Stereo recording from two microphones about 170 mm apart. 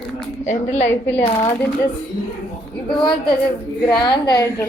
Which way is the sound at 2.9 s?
30° left (ahead or behind).